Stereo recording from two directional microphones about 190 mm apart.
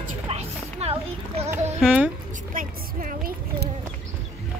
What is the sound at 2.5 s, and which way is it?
A woman's voice, 45° right (ahead or behind).